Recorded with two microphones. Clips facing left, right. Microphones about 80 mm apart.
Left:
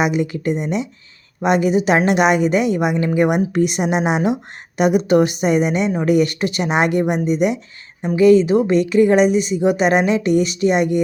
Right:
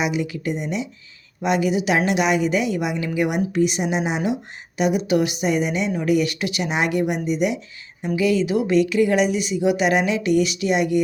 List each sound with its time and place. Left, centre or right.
0.0 s a woman's voice: left